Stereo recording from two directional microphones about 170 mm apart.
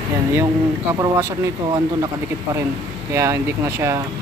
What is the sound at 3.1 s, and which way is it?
Speech, 15° right (ahead or behind).